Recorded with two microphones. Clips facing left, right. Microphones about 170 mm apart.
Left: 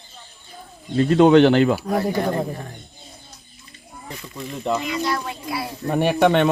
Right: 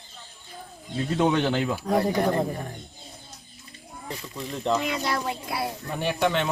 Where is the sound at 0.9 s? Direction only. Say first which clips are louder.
Left 10 dB; 75° left (ahead or behind).